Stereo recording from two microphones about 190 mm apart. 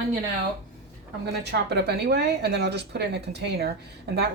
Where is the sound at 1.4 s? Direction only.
65° right (ahead or behind).